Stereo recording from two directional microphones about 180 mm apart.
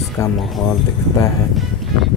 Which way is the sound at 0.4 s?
Centre (ahead or behind).